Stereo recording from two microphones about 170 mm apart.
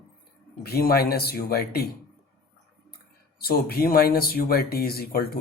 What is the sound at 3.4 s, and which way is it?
Speech, 65° left (ahead or behind).